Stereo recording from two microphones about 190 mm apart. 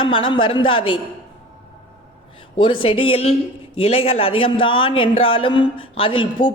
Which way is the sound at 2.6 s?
30° left (ahead or behind).